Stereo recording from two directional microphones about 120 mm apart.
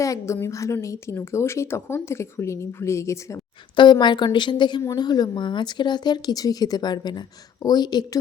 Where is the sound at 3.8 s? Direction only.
40° left (ahead or behind).